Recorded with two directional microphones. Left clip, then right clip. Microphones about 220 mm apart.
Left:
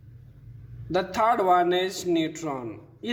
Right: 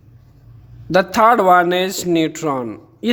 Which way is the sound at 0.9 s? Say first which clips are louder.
Right 11 dB; 45° right (ahead or behind).